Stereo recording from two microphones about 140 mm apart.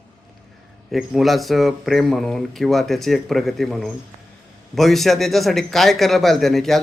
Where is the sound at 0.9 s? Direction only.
Centre (ahead or behind).